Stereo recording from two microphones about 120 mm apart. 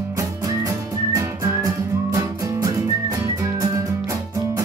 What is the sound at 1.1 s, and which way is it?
Music, 25° right (ahead or behind).